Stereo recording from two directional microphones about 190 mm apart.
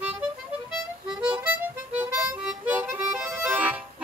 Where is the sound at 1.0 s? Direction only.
5° right (ahead or behind).